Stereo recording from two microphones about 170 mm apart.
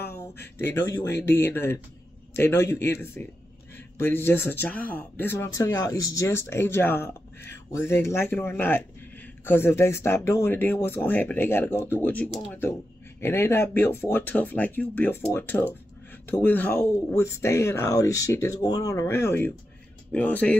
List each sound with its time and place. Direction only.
0.2 s a man's voice: 15° left (ahead or behind)